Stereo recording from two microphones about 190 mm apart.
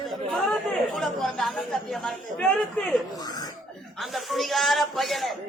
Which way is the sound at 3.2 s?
20° left (ahead or behind).